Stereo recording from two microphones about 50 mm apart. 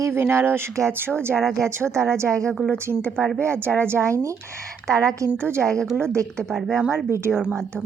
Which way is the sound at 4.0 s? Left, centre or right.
Right.